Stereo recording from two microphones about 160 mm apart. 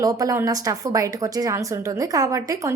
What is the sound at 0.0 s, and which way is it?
A woman's voice, 20° right (ahead or behind).